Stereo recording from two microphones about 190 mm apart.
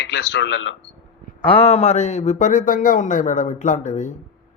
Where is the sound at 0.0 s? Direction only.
65° left (ahead or behind).